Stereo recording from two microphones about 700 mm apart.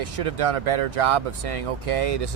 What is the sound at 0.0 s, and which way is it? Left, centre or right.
Speech, right.